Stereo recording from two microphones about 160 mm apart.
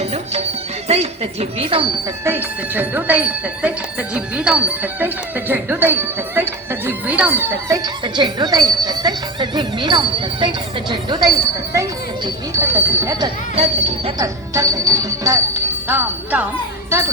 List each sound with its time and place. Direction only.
0.0 s music: 40° right (ahead or behind)
0.9 s speech: 40° right (ahead or behind)
2.2 s speech: 10° right (ahead or behind)
8.0 s speech: 25° right (ahead or behind)
13.6 s speech: 40° right (ahead or behind)
14.2 s speech: 20° right (ahead or behind)